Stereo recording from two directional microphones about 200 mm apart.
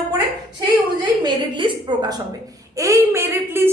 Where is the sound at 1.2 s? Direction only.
20° right (ahead or behind).